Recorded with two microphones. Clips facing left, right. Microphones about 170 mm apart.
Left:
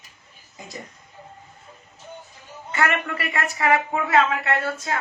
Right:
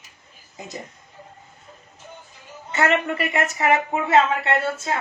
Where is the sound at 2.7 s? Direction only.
25° right (ahead or behind).